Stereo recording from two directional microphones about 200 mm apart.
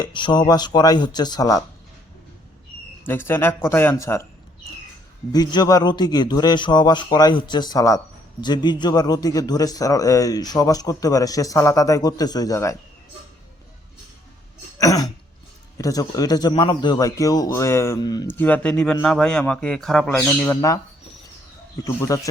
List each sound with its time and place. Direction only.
0.0 s speech: 25° left (ahead or behind)
3.0 s speech: 10° left (ahead or behind)
5.3 s speech: 20° left (ahead or behind)
14.8 s speech: 15° left (ahead or behind)
18.3 s a man's voice: 5° left (ahead or behind)
21.8 s speech: 15° left (ahead or behind)